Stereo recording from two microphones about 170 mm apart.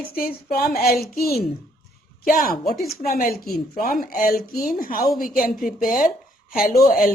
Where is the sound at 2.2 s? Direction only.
55° left (ahead or behind).